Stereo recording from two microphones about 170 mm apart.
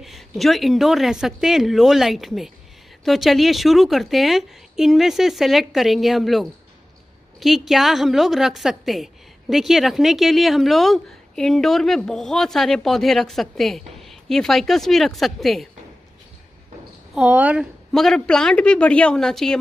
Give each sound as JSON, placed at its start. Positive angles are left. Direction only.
{"t": 0.0, "sound": "a woman's voice", "side_deg": 0}
{"t": 17.1, "sound": "speech", "side_deg": -10}
{"t": 17.9, "sound": "a woman's voice", "side_deg": 0}